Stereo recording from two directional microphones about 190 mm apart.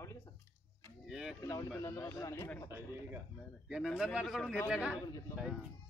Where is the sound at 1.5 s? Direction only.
20° left (ahead or behind).